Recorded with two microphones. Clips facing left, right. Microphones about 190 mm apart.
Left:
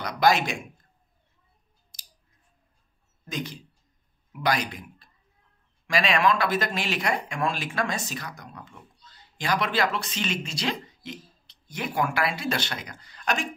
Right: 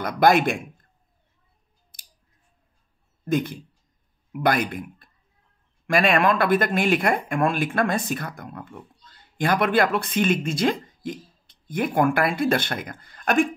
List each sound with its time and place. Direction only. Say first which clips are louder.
0.0 s speech: right 4 dB; 55° right (ahead or behind)
1.9 s scissors: left 1 dB; 55° right (ahead or behind)
3.3 s a man's voice: right 10 dB; 55° right (ahead or behind)